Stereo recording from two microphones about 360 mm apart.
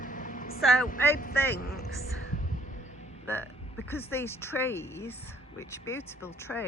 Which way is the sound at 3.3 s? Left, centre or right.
Centre.